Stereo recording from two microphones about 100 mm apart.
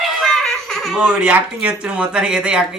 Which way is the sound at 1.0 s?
15° right (ahead or behind).